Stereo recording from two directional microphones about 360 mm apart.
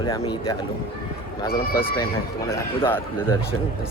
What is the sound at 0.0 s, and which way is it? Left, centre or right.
Speech, centre.